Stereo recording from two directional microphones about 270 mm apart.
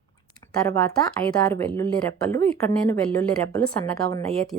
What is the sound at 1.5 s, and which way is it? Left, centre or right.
A woman's voice, centre.